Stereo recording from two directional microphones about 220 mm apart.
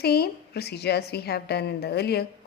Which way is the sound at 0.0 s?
45° left (ahead or behind).